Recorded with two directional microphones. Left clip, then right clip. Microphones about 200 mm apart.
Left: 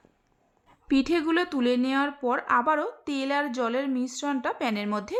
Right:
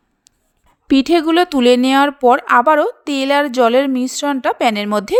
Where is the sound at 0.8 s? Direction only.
35° right (ahead or behind).